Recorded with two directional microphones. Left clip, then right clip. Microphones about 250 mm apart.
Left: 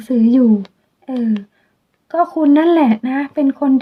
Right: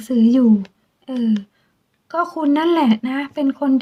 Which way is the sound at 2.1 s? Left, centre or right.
Right.